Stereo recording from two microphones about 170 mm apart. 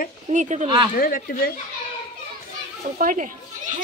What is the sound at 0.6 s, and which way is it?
Speech, 25° right (ahead or behind).